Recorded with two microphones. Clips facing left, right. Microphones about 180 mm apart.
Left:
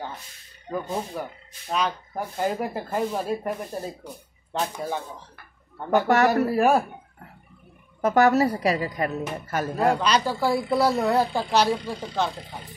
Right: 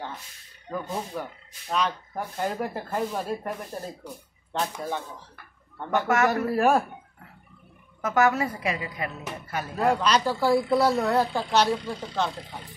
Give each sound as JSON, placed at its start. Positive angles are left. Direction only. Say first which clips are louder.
{"t": 1.1, "sound": "speech", "louder": "left 1 dB", "side_deg": 5}
{"t": 5.9, "sound": "a woman's voice", "louder": "left 4 dB", "side_deg": 35}
{"t": 6.5, "sound": "speech", "louder": "left 2 dB", "side_deg": 5}
{"t": 8.0, "sound": "a woman's voice", "louder": "left 4 dB", "side_deg": 35}
{"t": 9.9, "sound": "speech", "louder": "even", "side_deg": 0}